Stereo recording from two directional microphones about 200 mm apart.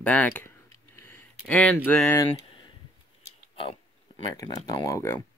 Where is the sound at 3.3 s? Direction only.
25° left (ahead or behind).